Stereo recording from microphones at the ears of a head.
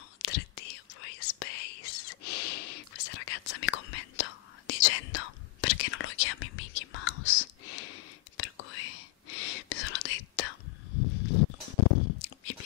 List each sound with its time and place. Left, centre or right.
0.2 s whispering: left